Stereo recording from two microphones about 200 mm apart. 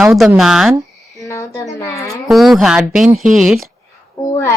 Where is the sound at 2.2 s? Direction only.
Centre (ahead or behind).